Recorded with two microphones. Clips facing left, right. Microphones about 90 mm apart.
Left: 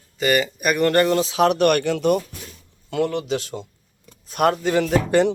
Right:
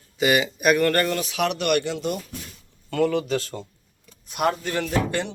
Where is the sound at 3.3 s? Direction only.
20° left (ahead or behind).